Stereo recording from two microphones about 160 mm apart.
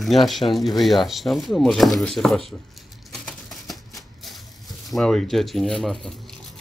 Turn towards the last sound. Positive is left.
turn(degrees=0)  # may be behind; listen again after turning